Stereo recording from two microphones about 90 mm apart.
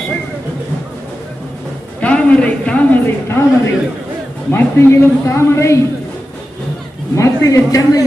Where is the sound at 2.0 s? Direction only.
15° left (ahead or behind).